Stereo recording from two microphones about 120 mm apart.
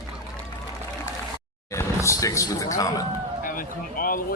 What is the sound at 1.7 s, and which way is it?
Speech, 25° left (ahead or behind).